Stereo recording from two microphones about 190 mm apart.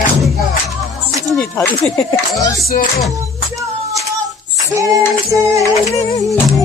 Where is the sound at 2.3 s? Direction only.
20° left (ahead or behind).